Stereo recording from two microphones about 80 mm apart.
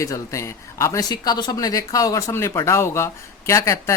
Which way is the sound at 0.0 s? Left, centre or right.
Left.